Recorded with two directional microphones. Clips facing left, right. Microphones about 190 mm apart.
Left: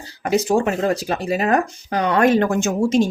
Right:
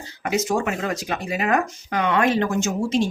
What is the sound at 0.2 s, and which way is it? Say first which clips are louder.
Speech: left 5 dB; 35° left (ahead or behind).